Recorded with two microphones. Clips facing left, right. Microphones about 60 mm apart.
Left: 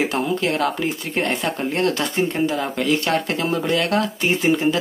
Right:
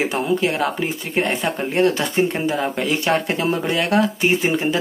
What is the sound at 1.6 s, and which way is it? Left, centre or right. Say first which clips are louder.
Speech: right 4 dB; centre.